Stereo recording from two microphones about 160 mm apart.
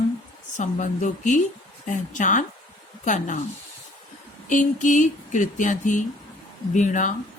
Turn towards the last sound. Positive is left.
turn(degrees=50)  # may be behind; listen again after turning